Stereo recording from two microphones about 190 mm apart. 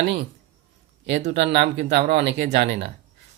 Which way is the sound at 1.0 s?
65° right (ahead or behind).